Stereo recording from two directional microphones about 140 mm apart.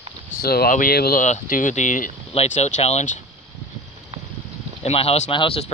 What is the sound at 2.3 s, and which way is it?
Speech, 50° left (ahead or behind).